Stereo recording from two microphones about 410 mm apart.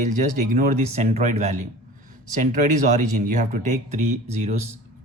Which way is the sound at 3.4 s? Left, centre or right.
Centre.